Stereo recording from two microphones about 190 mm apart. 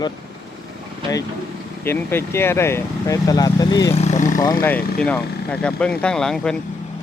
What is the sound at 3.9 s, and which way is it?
Speech, 35° left (ahead or behind).